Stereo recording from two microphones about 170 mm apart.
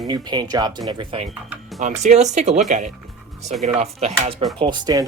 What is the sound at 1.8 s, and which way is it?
Speech, 45° right (ahead or behind).